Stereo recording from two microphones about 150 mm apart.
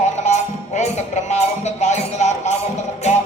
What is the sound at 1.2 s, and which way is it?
Speech, 50° left (ahead or behind).